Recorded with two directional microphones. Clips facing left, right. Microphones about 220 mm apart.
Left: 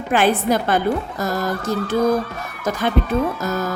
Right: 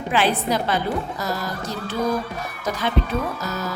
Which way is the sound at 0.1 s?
50° left (ahead or behind).